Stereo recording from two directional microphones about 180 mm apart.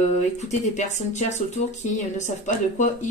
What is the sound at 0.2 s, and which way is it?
Speech, 40° left (ahead or behind).